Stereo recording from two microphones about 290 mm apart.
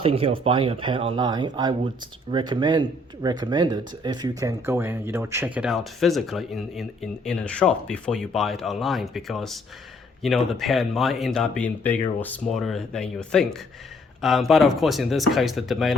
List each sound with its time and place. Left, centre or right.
0.0 s speech: centre